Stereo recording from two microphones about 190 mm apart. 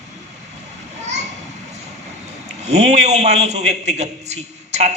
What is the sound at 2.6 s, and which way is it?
A man's voice, 35° right (ahead or behind).